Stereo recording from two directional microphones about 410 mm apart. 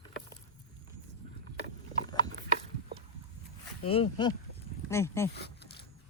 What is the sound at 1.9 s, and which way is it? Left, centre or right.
Gears, centre.